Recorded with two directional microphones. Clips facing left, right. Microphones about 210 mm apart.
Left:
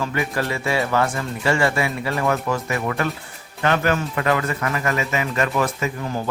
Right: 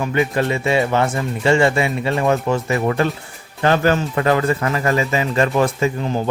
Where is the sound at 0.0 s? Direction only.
20° right (ahead or behind).